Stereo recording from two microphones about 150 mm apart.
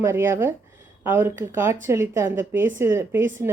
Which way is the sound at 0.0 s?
15° right (ahead or behind).